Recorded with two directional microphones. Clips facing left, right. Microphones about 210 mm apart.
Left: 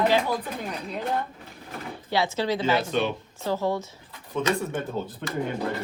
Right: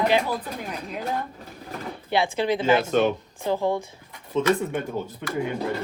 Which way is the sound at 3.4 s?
15° right (ahead or behind).